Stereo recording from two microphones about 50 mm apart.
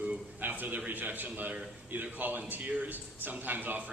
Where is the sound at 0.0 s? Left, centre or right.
Right.